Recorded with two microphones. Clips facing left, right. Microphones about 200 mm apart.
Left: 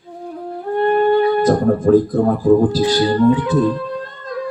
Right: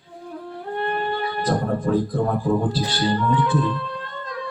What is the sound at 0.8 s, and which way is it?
Speech, 45° left (ahead or behind).